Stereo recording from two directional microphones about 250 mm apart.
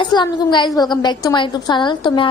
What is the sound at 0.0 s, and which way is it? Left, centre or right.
A woman's voice, centre.